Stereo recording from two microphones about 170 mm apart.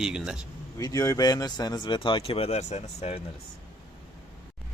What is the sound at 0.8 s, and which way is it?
Speech, 20° left (ahead or behind).